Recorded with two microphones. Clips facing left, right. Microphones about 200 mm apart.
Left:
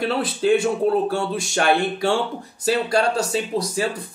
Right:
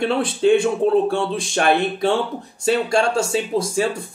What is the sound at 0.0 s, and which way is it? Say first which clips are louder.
Speech: right 3 dB; 5° left (ahead or behind).